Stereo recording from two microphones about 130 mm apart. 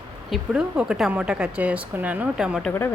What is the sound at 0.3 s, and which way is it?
A woman's voice, 5° right (ahead or behind).